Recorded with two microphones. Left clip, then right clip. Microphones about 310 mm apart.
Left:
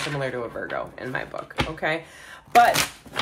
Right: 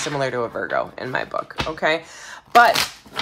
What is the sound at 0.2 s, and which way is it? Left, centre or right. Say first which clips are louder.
Speech: right 6 dB; right.